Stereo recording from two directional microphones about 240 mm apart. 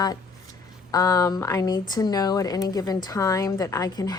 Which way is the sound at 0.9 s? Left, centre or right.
Centre.